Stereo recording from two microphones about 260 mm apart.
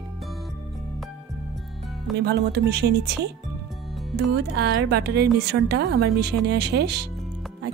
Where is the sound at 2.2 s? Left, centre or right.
Right.